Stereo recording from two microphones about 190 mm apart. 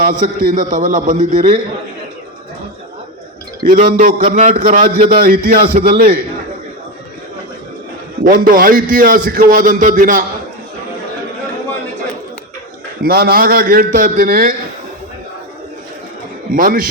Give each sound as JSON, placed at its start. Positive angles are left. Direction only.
{"t": 0.0, "sound": "a man's voice", "side_deg": -40}
{"t": 3.6, "sound": "a man's voice", "side_deg": -45}
{"t": 8.2, "sound": "a man's voice", "side_deg": -45}
{"t": 13.0, "sound": "a man's voice", "side_deg": -55}
{"t": 16.5, "sound": "a man's voice", "side_deg": -45}